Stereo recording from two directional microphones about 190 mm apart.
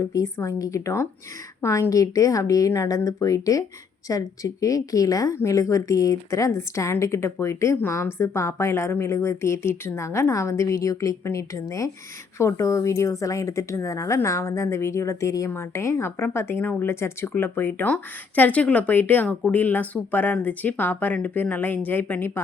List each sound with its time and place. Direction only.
0.1 s speech: 15° left (ahead or behind)